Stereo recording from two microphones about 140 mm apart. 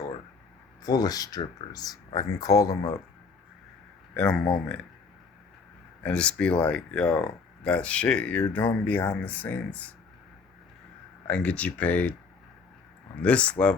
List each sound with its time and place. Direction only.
0.8 s speech: 25° left (ahead or behind)
4.1 s speech: 5° left (ahead or behind)
6.0 s speech: 10° left (ahead or behind)
11.3 s speech: 10° left (ahead or behind)
13.2 s speech: 10° left (ahead or behind)